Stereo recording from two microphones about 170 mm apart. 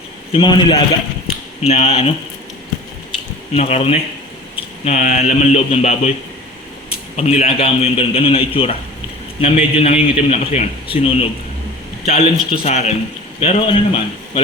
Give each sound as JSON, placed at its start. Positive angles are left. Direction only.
{"t": 0.3, "sound": "a man's voice", "side_deg": 30}
{"t": 3.5, "sound": "a man's voice", "side_deg": 40}
{"t": 7.2, "sound": "a man's voice", "side_deg": 40}